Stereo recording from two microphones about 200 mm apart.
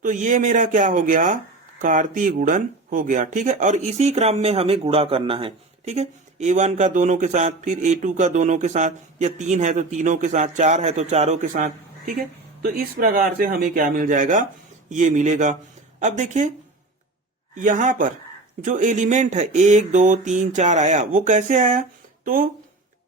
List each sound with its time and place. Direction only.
0.0 s speech: 40° right (ahead or behind)
17.5 s speech: 40° right (ahead or behind)